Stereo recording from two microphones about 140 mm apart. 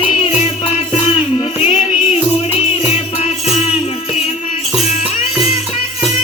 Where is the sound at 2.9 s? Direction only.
50° left (ahead or behind).